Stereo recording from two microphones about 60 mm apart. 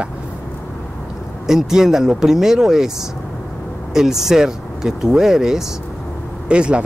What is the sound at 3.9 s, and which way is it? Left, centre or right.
Speech, centre.